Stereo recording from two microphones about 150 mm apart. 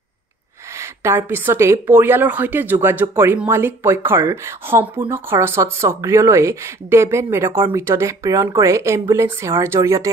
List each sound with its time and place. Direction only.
0.7 s speech: 15° right (ahead or behind)